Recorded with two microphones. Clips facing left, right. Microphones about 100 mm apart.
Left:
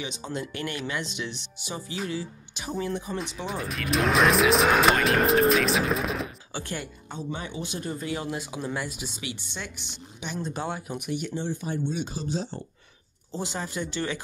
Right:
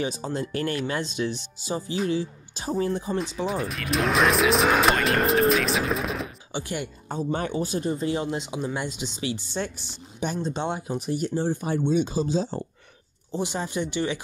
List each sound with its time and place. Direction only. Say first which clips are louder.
0.0 s speech: right 5 dB; 35° right (ahead or behind)
3.2 s speech: right 5 dB; centre (ahead or behind)
6.5 s speech: right 7 dB; 20° right (ahead or behind)
7.1 s speech: right 8 dB; 45° right (ahead or behind)
7.8 s speech: right 5 dB; 25° right (ahead or behind)
10.5 s speech: right 4 dB; 25° right (ahead or behind)
11.6 s speech: right 4 dB; 90° right
13.3 s speech: right 4 dB; 20° right (ahead or behind)